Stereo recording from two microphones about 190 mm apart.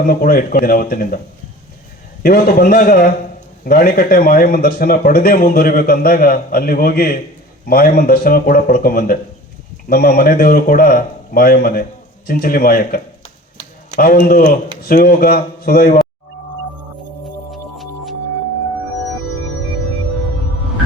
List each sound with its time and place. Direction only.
0.1 s a man's voice: 50° left (ahead or behind)
2.2 s a man's voice: 55° left (ahead or behind)
17.5 s music: centre (ahead or behind)